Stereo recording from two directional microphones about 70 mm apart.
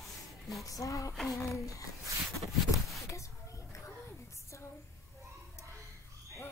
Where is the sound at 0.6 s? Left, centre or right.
Left.